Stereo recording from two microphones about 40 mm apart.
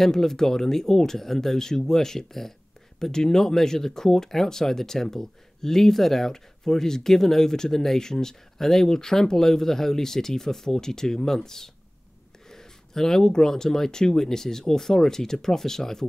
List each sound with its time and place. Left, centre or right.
0.0 s speech: centre